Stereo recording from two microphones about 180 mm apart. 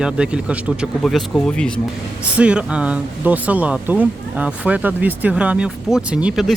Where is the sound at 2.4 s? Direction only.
5° right (ahead or behind).